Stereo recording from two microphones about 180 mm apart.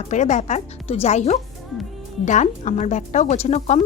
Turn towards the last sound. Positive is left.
turn(degrees=40)  # may be behind; listen again after turning